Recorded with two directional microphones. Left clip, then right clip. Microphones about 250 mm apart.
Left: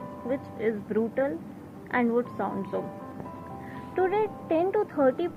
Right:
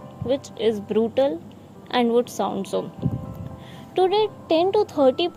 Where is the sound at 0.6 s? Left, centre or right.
Right.